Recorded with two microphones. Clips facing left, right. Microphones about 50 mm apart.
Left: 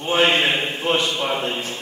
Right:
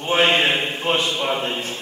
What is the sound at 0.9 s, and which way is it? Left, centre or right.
Speech, centre.